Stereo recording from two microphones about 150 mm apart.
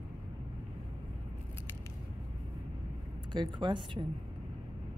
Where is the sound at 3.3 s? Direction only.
30° right (ahead or behind).